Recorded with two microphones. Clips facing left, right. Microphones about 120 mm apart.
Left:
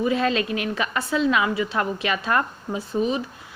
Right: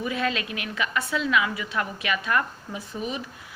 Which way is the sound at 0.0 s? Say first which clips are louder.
Left 6 dB; 30° left (ahead or behind).